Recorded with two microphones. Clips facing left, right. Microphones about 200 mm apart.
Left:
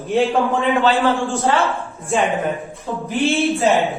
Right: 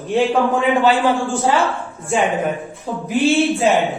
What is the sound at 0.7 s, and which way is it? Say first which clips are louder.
Speech: even; 15° right (ahead or behind).